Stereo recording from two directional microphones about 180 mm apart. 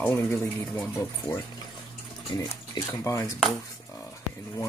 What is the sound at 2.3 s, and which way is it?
Speech, 20° left (ahead or behind).